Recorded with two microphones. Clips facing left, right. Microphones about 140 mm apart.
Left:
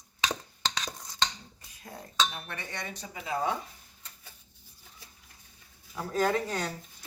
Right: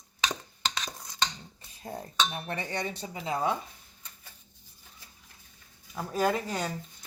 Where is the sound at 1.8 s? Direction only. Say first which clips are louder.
Right 1 dB; 35° right (ahead or behind).